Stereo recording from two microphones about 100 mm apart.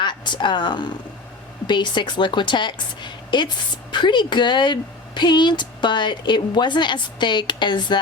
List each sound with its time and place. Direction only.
0.0 s a woman's voice: 50° left (ahead or behind)